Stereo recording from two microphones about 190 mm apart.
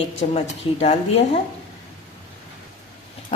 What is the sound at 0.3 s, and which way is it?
Speech, 35° left (ahead or behind).